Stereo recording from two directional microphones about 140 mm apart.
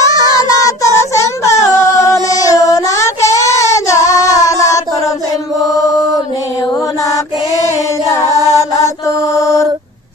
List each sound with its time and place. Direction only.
0.0 s child singing: 25° left (ahead or behind)
4.2 s female singing: 25° left (ahead or behind)
8.4 s mantra: 25° left (ahead or behind)